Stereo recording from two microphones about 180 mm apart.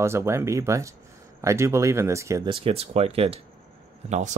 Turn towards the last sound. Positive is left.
turn(degrees=-40)  # may be behind; listen again after turning